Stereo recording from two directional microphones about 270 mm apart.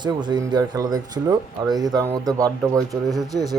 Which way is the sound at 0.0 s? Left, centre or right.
Centre.